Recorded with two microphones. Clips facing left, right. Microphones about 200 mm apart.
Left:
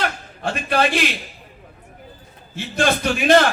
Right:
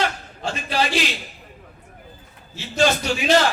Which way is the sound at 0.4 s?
55° left (ahead or behind).